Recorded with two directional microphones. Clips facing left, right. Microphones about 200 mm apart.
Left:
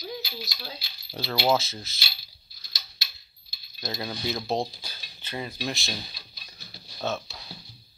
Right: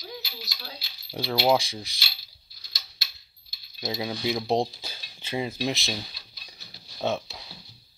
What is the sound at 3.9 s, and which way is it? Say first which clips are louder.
Speech: right 3 dB; 10° right (ahead or behind).